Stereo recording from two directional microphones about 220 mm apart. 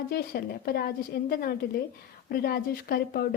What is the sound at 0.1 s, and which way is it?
Speech, 45° left (ahead or behind).